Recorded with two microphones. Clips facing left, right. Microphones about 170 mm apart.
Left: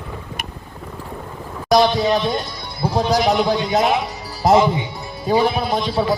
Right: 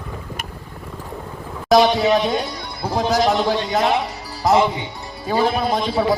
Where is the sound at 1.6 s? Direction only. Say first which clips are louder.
Right 1 dB; centre (ahead or behind).